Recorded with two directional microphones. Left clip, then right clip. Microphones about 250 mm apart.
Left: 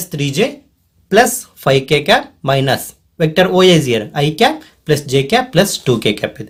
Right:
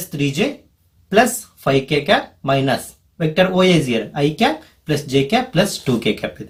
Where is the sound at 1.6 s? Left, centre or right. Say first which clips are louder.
Left 4 dB; left.